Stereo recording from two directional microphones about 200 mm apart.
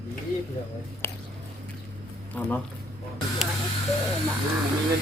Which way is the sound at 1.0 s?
15° left (ahead or behind).